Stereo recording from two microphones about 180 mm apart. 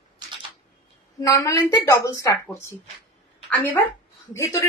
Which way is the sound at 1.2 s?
20° left (ahead or behind).